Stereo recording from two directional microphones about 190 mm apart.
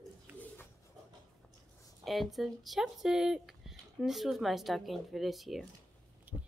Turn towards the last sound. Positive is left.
turn(degrees=0)  # may be behind; listen again after turning